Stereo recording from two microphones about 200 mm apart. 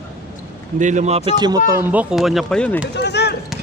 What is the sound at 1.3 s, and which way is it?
Speech, 20° right (ahead or behind).